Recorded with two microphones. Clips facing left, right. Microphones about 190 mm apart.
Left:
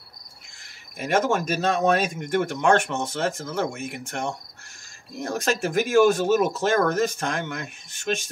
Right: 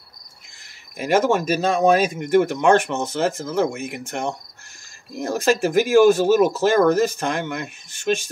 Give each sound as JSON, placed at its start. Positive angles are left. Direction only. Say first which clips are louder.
{"t": 0.9, "sound": "speech", "louder": "right 4 dB", "side_deg": 0}